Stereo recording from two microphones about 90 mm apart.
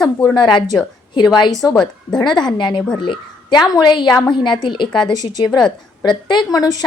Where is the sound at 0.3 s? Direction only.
60° left (ahead or behind).